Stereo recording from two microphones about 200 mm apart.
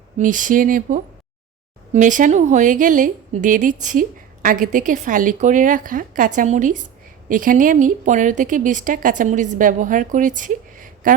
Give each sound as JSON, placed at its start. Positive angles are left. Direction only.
{"t": 0.2, "sound": "speech", "side_deg": -40}